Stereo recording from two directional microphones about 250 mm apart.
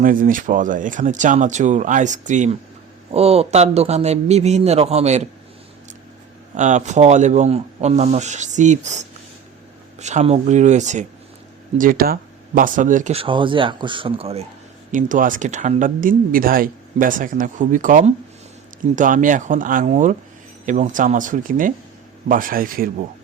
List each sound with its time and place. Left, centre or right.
0.0 s speech: right
6.5 s speech: right